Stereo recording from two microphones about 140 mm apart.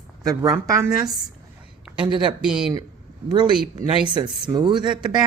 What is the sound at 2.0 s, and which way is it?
Speech, 35° right (ahead or behind).